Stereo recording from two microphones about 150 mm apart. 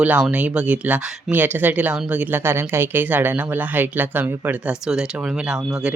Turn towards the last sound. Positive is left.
turn(degrees=-5)  # may be behind; listen again after turning